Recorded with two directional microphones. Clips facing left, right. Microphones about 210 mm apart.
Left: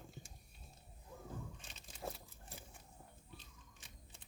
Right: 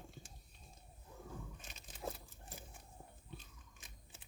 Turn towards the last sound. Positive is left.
turn(degrees=-20)  # may be behind; listen again after turning